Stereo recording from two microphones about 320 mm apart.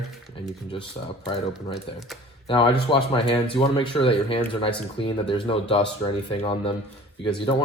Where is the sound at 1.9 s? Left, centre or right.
Centre.